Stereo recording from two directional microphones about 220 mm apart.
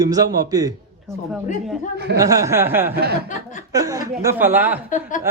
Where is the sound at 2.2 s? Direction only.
15° right (ahead or behind).